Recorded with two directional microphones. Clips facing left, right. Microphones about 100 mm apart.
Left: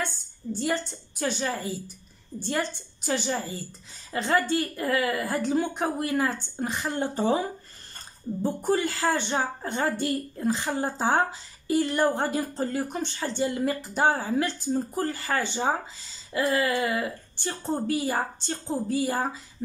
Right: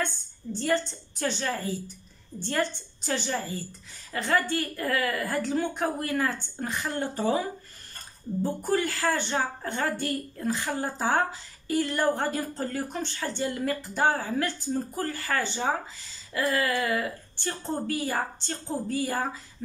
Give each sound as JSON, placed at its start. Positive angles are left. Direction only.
{"t": 0.0, "sound": "a woman's voice", "side_deg": 15}